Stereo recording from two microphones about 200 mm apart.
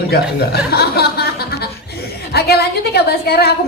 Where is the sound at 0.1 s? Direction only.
50° left (ahead or behind).